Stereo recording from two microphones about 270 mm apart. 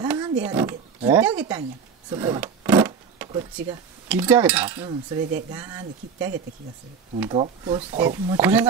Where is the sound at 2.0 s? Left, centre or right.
Centre.